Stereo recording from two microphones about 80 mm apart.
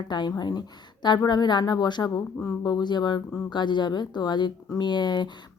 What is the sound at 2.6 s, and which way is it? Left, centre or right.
Speech, left.